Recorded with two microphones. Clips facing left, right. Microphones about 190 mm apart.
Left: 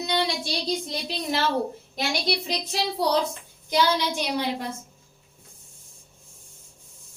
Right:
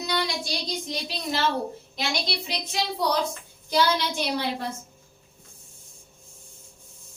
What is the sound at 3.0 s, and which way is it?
Speech, 30° left (ahead or behind).